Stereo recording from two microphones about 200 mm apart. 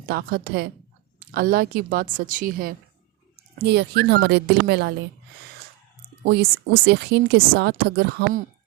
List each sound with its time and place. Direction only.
0.0 s speech: 45° right (ahead or behind)
6.2 s speech: 55° right (ahead or behind)